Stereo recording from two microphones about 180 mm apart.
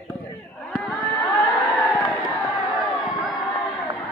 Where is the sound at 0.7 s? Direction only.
Centre (ahead or behind).